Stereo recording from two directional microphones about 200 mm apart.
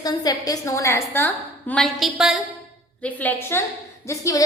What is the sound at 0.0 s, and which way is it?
A woman's voice, 20° left (ahead or behind).